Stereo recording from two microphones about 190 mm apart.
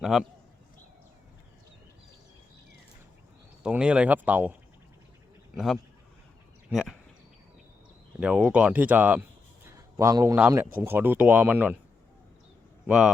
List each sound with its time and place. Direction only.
0.0 s speech: centre (ahead or behind)
3.6 s speech: 5° right (ahead or behind)
5.5 s speech: centre (ahead or behind)
8.2 s a man's voice: 5° right (ahead or behind)
12.9 s speech: centre (ahead or behind)